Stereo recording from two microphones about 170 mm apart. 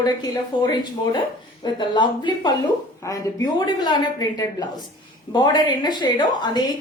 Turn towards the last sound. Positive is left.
turn(degrees=25)  # may be behind; listen again after turning